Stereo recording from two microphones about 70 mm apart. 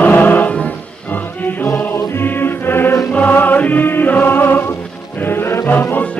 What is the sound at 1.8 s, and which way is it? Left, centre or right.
Music, left.